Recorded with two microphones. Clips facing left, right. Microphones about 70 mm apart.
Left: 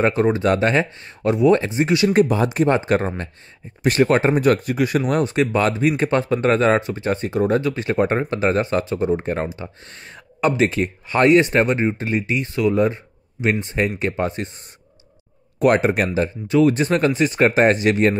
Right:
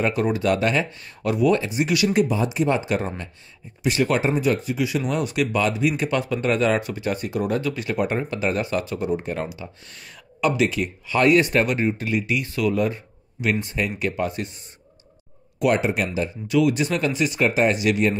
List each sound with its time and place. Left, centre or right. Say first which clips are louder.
0.0 s speech: left 4 dB; left
2.1 s speech: left 4 dB; left
5.2 s speech: left 4 dB; left
11.2 s speech: left 3 dB; left
15.6 s speech: left 4 dB; left